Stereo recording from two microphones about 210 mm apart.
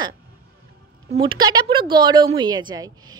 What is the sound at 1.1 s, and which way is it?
A woman's voice, 25° right (ahead or behind).